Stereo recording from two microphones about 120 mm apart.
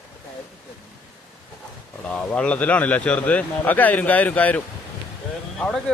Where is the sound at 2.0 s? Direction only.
10° left (ahead or behind).